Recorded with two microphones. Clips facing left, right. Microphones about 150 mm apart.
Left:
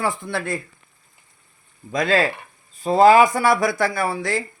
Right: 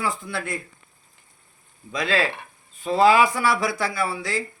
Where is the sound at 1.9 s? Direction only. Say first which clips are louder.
Left 4 dB; 45° left (ahead or behind).